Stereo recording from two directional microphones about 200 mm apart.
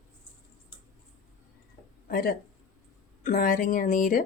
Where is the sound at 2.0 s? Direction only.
50° left (ahead or behind).